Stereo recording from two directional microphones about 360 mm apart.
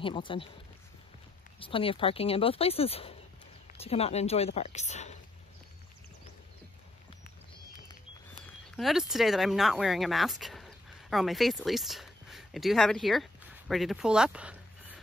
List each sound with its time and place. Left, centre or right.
0.0 s speech: centre
1.6 s speech: centre
8.7 s speech: centre